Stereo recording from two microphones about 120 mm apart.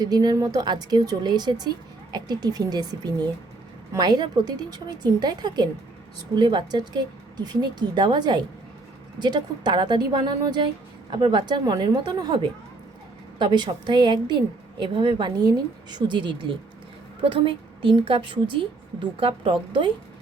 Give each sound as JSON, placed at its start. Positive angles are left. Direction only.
{"t": 0.0, "sound": "a woman's voice", "side_deg": -35}